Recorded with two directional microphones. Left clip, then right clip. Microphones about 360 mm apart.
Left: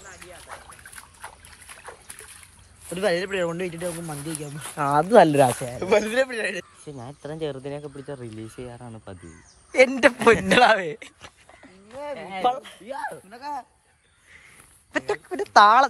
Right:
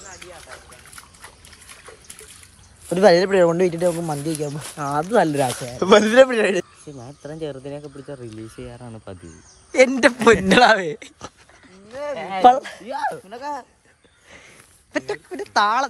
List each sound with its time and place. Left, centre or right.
2.9 s speech: centre
4.7 s speech: centre
5.8 s speech: centre
7.0 s speech: left
8.5 s speech: centre
12.0 s a sound: right
12.8 s speech: right
13.3 s speech: centre
14.9 s speech: centre